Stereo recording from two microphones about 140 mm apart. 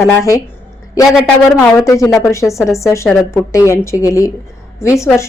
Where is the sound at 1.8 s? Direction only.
25° left (ahead or behind).